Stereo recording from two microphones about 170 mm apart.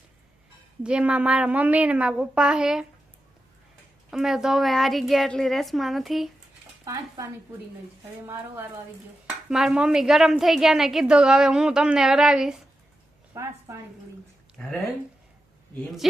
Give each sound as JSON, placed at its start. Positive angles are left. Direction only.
{"t": 0.8, "sound": "a woman's voice", "side_deg": -5}
{"t": 4.1, "sound": "a woman's voice", "side_deg": 0}
{"t": 6.8, "sound": "speech", "side_deg": -20}
{"t": 9.5, "sound": "a woman's voice", "side_deg": -5}
{"t": 13.3, "sound": "a woman's voice", "side_deg": -15}
{"t": 14.6, "sound": "a woman's voice", "side_deg": 5}